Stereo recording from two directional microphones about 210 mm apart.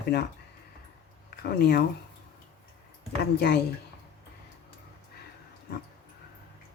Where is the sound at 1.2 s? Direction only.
45° left (ahead or behind).